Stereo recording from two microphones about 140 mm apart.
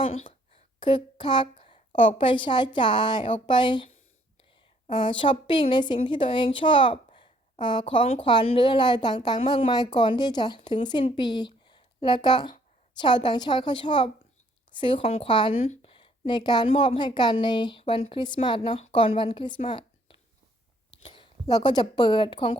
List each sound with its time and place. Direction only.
0.0 s a sound: 40° left (ahead or behind)
2.0 s a woman's voice: 40° left (ahead or behind)
4.9 s a woman's voice: 35° left (ahead or behind)